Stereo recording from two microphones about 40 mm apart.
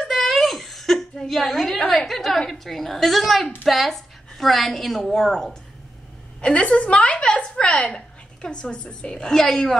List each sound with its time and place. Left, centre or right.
0.0 s a sound: centre
1.1 s a woman's voice: centre
5.1 s a woman's voice: centre
6.4 s a woman's voice: left
9.2 s a woman's voice: centre